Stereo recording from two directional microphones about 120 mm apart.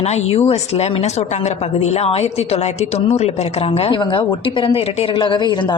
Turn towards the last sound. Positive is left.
turn(degrees=40)  # may be behind; listen again after turning